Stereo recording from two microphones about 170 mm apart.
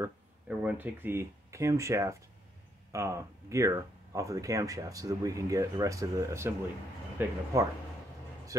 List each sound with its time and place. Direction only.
0.0 s speech: 10° right (ahead or behind)